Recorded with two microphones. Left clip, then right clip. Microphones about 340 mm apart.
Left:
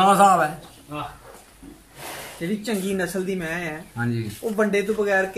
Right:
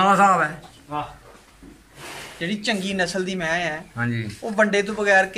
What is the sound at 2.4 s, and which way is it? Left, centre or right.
A man's voice, right.